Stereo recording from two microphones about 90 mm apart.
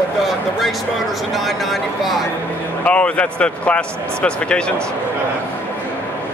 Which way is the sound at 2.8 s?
15° left (ahead or behind).